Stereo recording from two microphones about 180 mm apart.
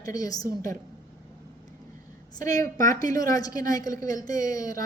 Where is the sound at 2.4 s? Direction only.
20° left (ahead or behind).